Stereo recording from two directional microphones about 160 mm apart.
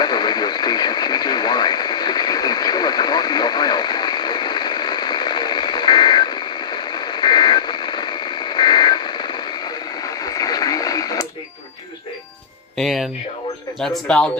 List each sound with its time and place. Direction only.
0.0 s radio: 25° left (ahead or behind)
12.7 s music: centre (ahead or behind)
13.7 s speech: centre (ahead or behind)